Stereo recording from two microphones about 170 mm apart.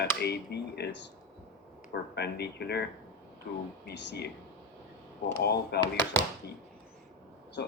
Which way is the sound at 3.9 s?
75° left (ahead or behind).